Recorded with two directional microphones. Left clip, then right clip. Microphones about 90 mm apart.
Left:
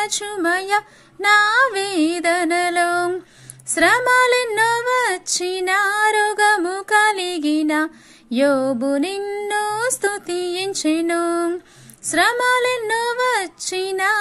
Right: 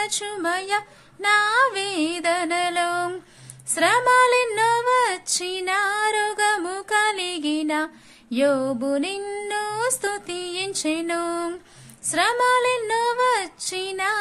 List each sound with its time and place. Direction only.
0.0 s speech: 40° left (ahead or behind)
4.6 s female singing: 40° left (ahead or behind)
6.9 s speech: 40° left (ahead or behind)
9.2 s music: 20° left (ahead or behind)
9.5 s speech: 45° left (ahead or behind)